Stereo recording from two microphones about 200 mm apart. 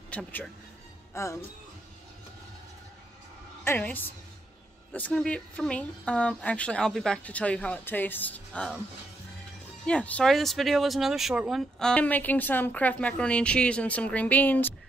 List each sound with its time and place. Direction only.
0.1 s speech: 5° left (ahead or behind)
3.6 s a woman's voice: 10° left (ahead or behind)
9.8 s speech: 5° left (ahead or behind)